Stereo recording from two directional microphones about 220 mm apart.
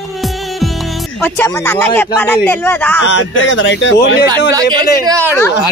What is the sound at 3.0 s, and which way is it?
Speech, 60° left (ahead or behind).